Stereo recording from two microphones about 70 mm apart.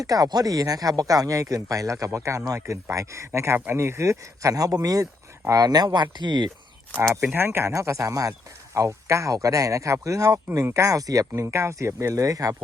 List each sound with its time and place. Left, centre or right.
0.0 s speech: right
7.3 s speech: right